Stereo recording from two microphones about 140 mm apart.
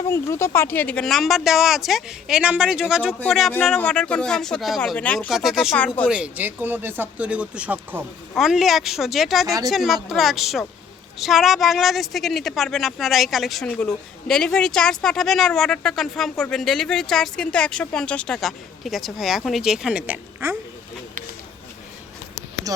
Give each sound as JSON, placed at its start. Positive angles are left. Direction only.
{"t": 0.1, "sound": "a woman's voice", "side_deg": 20}
{"t": 4.9, "sound": "speech", "side_deg": 10}
{"t": 5.3, "sound": "a woman's voice", "side_deg": 0}
{"t": 5.7, "sound": "speech", "side_deg": 10}
{"t": 6.1, "sound": "a woman's voice", "side_deg": -10}
{"t": 22.7, "sound": "speech", "side_deg": -25}